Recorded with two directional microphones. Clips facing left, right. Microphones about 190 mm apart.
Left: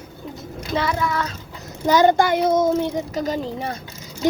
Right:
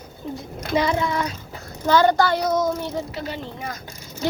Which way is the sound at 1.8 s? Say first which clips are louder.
Left 2 dB; 15° left (ahead or behind).